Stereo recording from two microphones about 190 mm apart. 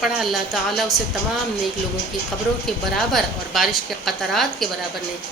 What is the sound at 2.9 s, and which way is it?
A woman's voice, centre (ahead or behind).